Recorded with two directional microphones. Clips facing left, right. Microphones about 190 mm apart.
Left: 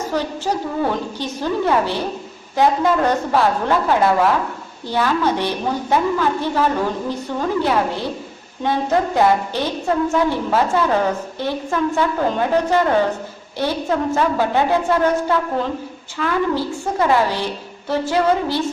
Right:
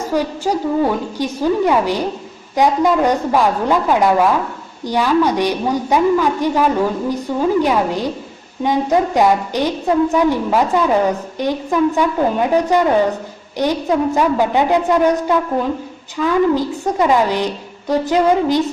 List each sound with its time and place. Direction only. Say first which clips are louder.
0.1 s a woman's voice: right 5 dB; 10° right (ahead or behind)